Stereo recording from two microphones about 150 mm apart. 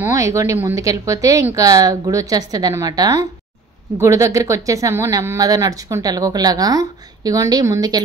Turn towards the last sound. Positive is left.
turn(degrees=-25)  # may be behind; listen again after turning